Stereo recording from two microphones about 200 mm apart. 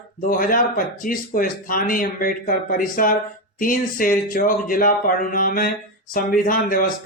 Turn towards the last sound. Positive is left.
turn(degrees=45)  # may be behind; listen again after turning